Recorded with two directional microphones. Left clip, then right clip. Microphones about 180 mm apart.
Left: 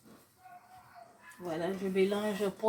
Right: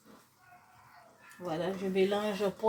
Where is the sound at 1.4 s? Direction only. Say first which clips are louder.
Right 1 dB; 35° right (ahead or behind).